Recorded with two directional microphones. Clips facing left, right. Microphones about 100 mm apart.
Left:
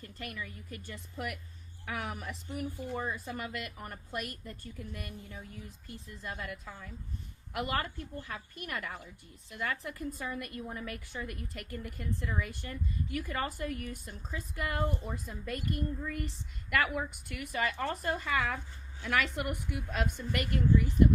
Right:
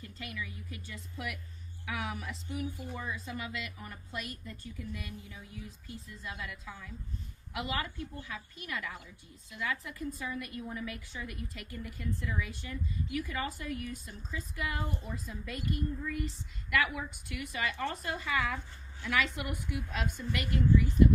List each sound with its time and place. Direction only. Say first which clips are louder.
0.0 s a woman's voice: even; 50° left (ahead or behind)
1.9 s a woman's voice: even; 45° left (ahead or behind)
2.9 s speech: left 4 dB; 40° left (ahead or behind)
3.2 s a woman's voice: left 1 dB; 50° left (ahead or behind)